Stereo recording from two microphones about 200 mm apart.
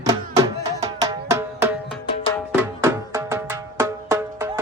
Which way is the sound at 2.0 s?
25° left (ahead or behind).